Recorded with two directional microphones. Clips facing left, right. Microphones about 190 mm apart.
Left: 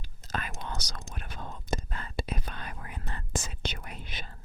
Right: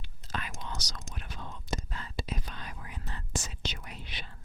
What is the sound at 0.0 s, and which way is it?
Whispering, 45° left (ahead or behind).